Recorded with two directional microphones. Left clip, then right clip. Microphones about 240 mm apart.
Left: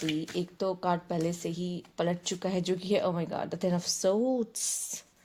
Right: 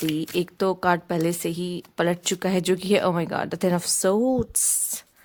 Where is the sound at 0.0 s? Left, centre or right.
Right.